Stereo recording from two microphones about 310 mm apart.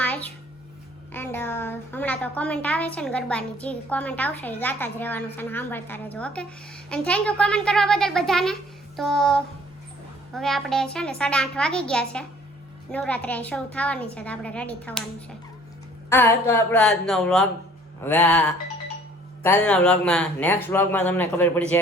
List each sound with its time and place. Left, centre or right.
0.0 s a sound: centre
1.1 s a woman's voice: centre
16.0 s a woman's voice: centre